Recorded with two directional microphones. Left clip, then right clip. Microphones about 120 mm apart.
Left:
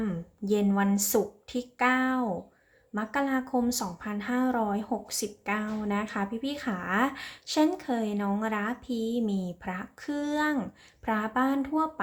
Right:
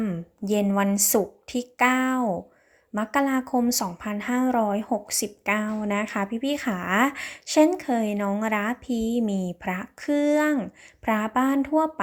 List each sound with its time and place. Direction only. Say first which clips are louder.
0.4 s a woman's voice: right 3 dB; 50° right (ahead or behind)